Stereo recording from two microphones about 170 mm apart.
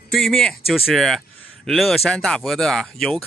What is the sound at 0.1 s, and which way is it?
Speech, centre (ahead or behind).